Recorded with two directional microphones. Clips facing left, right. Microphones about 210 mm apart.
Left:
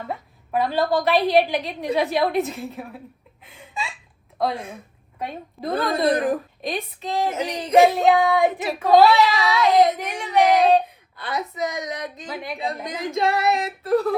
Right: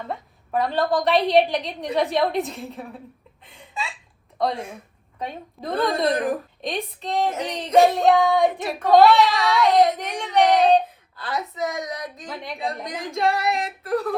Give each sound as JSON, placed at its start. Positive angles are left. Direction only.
{"t": 0.1, "sound": "a woman's voice", "side_deg": 0}
{"t": 3.4, "sound": "hiccup", "side_deg": 0}
{"t": 4.4, "sound": "a woman's voice", "side_deg": 0}
{"t": 11.7, "sound": "a sound", "side_deg": 20}
{"t": 11.9, "sound": "a woman's voice", "side_deg": 0}
{"t": 13.8, "sound": "a sound", "side_deg": 30}